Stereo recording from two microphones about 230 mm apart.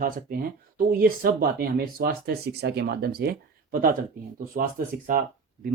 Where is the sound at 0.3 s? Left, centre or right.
Right.